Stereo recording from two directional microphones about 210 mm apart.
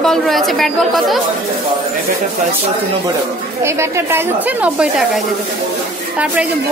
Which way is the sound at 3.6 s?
10° right (ahead or behind).